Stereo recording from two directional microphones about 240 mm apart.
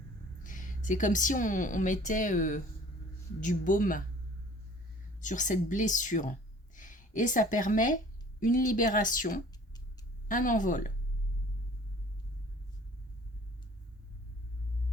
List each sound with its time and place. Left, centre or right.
0.4 s speech: left
5.2 s speech: left